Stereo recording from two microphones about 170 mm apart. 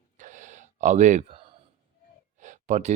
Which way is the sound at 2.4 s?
45° right (ahead or behind).